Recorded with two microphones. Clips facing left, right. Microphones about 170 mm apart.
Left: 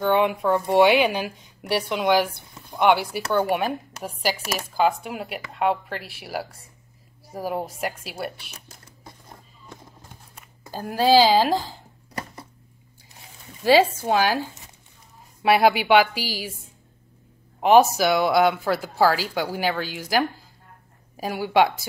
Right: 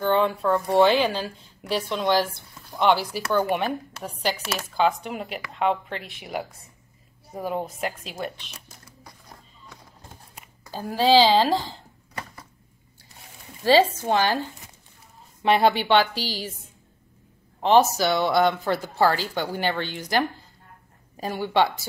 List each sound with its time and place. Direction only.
0.0 s speech: 15° left (ahead or behind)
3.1 s speech: 5° left (ahead or behind)
10.6 s speech: 15° left (ahead or behind)
13.7 s speech: 10° left (ahead or behind)
17.6 s speech: 10° left (ahead or behind)